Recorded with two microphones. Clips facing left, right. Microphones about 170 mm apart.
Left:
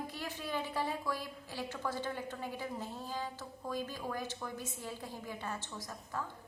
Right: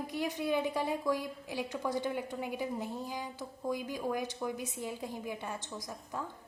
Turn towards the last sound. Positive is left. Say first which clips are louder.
# right 1 dB
turn(degrees=-15)  # may be behind; listen again after turning